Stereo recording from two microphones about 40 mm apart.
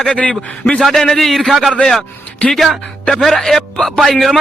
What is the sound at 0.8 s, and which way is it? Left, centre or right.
A man's voice, centre.